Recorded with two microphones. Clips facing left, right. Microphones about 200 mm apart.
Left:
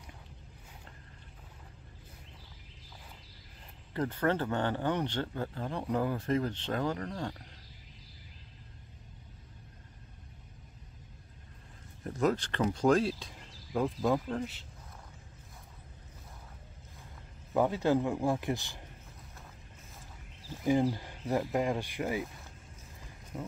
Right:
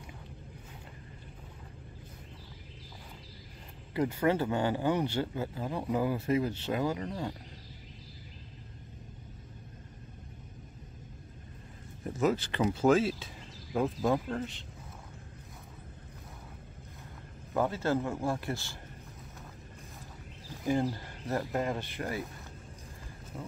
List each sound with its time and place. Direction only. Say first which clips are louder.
3.9 s speech: right 2 dB; 10° right (ahead or behind)
12.0 s speech: right 1 dB; 5° right (ahead or behind)
17.6 s speech: left 2 dB; 15° left (ahead or behind)
20.6 s speech: left 2 dB; 15° left (ahead or behind)
23.3 s speech: left 2 dB; centre (ahead or behind)